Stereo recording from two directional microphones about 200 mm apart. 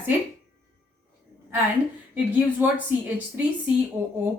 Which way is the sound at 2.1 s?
10° right (ahead or behind).